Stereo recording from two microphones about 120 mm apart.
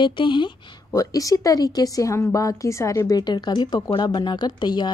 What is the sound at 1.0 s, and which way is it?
Speech, 30° left (ahead or behind).